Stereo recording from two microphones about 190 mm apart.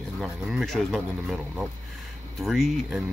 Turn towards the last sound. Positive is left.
turn(degrees=0)  # may be behind; listen again after turning